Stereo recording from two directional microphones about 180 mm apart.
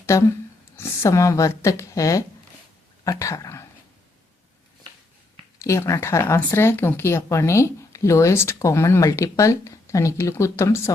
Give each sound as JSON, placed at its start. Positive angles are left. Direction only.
{"t": 0.0, "sound": "speech", "side_deg": 15}
{"t": 5.6, "sound": "speech", "side_deg": 15}